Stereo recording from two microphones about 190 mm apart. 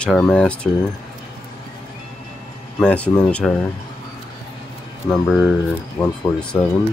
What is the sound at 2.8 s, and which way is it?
Speech, 5° left (ahead or behind).